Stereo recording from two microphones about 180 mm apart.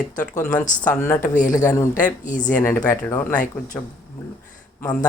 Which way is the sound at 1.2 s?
45° left (ahead or behind).